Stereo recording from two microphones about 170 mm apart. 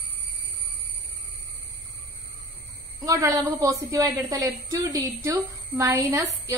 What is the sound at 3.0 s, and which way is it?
A woman's voice, 20° right (ahead or behind).